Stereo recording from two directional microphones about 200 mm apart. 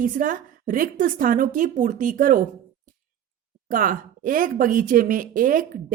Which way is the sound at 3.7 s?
45° right (ahead or behind).